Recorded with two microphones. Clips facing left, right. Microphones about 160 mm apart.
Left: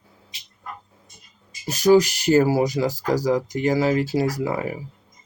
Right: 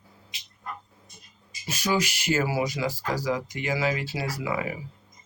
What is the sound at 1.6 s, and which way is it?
Speech, 40° left (ahead or behind).